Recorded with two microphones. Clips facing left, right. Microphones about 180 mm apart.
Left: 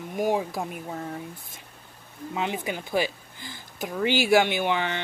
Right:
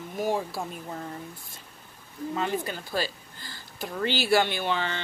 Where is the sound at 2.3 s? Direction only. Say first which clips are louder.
Even; 15° left (ahead or behind).